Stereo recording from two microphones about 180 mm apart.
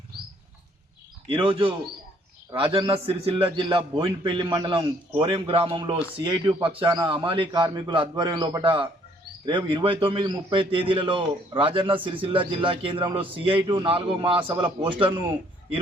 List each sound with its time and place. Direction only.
1.3 s a man's voice: 30° right (ahead or behind)